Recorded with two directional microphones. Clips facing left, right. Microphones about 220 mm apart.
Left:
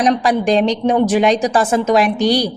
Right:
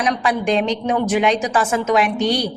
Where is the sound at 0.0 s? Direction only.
35° left (ahead or behind).